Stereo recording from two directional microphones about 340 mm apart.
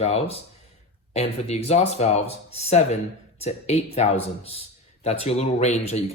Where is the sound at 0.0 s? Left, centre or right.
Centre.